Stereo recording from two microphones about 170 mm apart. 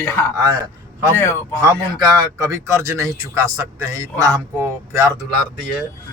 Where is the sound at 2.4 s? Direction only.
15° right (ahead or behind).